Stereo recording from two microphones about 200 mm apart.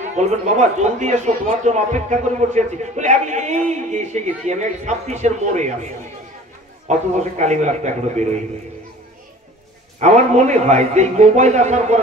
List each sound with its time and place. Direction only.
0.2 s a man's voice: 35° right (ahead or behind)
7.2 s a man's voice: 35° right (ahead or behind)
9.9 s a man's voice: 35° right (ahead or behind)